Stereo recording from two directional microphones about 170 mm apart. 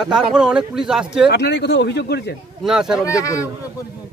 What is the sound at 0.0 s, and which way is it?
A man's voice, 5° right (ahead or behind).